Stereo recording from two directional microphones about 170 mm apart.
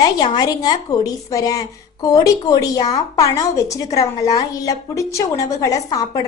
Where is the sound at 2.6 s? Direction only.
20° left (ahead or behind).